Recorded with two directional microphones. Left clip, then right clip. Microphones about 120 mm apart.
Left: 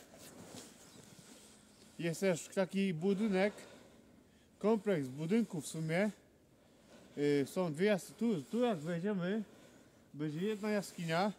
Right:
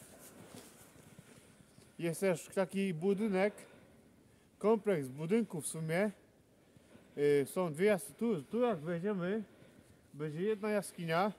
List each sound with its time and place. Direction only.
2.0 s speech: 5° right (ahead or behind)
7.2 s speech: 10° right (ahead or behind)
10.1 s speech: 25° right (ahead or behind)
11.1 s speech: 10° right (ahead or behind)